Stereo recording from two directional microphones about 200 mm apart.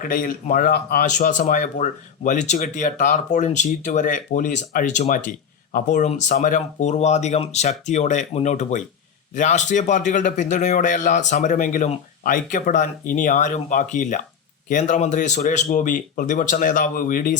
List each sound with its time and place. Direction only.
0.0 s speech: 45° left (ahead or behind)